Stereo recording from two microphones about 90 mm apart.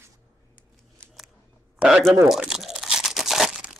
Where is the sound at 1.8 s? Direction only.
10° right (ahead or behind).